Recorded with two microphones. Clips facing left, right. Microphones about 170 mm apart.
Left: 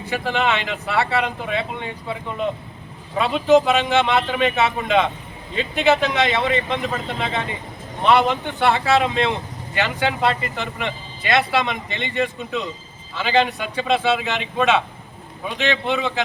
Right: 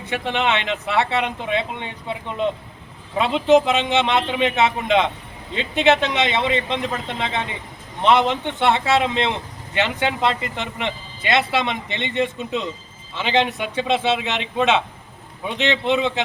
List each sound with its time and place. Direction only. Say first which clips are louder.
0.1 s speech: even; 20° right (ahead or behind)